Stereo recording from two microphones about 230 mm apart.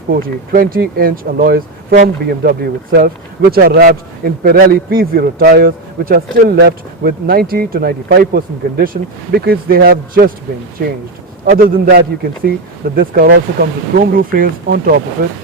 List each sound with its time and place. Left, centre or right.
0.1 s speech: right
11.4 s speech: right